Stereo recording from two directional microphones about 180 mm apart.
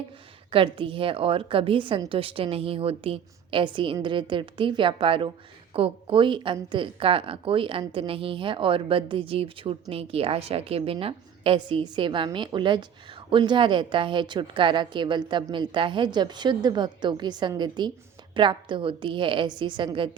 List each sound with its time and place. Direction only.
0.5 s speech: 30° right (ahead or behind)